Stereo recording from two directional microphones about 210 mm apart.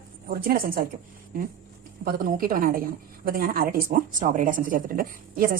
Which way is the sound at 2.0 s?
40° right (ahead or behind).